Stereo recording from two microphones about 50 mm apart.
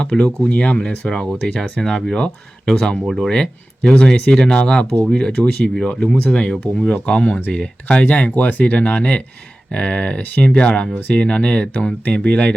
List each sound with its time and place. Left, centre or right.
0.0 s speech: centre
1.3 s speech: centre; by 12.5 s left